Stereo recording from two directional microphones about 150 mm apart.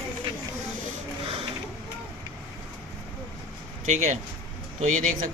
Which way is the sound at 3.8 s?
55° right (ahead or behind).